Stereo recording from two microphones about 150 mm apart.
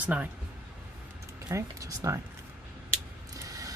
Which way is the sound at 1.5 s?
20° right (ahead or behind).